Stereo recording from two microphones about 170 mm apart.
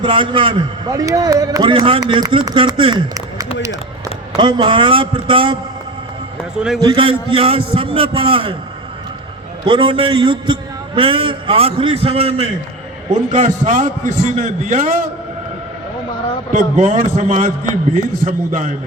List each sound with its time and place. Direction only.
0.0 s a man's voice: 30° right (ahead or behind)
0.9 s a man's voice: 20° right (ahead or behind)
6.6 s a man's voice: centre (ahead or behind)
6.8 s a man's voice: 30° right (ahead or behind)
9.6 s a man's voice: 30° right (ahead or behind); by 14.9 s 45° right (ahead or behind)
16.5 s a man's voice: 45° right (ahead or behind)